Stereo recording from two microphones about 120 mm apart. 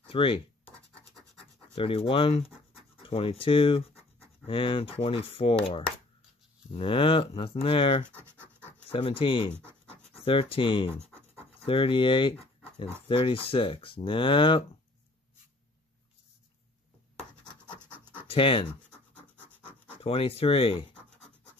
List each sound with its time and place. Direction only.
0.1 s speech: 50° left (ahead or behind)
1.8 s speech: 50° left (ahead or behind)
8.2 s scratch: 20° right (ahead or behind)
8.8 s speech: 55° left (ahead or behind)
17.7 s scratch: 15° right (ahead or behind)
18.2 s speech: 50° left (ahead or behind)
19.3 s scratch: 15° right (ahead or behind)
20.0 s speech: 50° left (ahead or behind)